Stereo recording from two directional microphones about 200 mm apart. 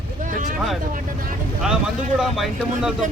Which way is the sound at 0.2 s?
40° right (ahead or behind).